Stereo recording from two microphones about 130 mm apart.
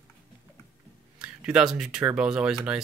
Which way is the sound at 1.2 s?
5° right (ahead or behind).